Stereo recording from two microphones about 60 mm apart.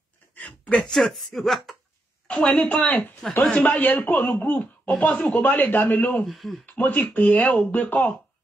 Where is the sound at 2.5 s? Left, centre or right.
Left.